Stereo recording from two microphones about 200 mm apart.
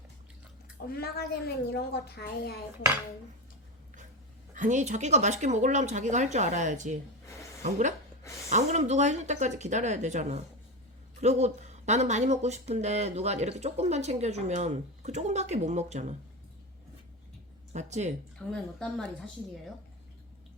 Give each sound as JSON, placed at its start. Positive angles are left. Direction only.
{"t": 0.9, "sound": "a woman's voice", "side_deg": 50}
{"t": 4.5, "sound": "speech", "side_deg": -40}
{"t": 17.7, "sound": "speech", "side_deg": -35}
{"t": 18.3, "sound": "a woman's voice", "side_deg": 5}